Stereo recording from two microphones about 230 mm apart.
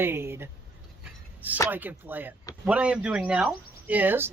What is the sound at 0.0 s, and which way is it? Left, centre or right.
Speech, centre.